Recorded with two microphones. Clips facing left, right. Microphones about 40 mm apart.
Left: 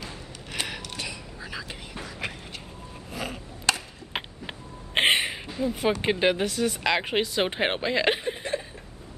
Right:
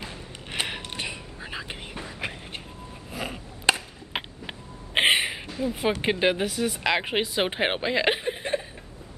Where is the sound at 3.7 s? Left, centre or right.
Right.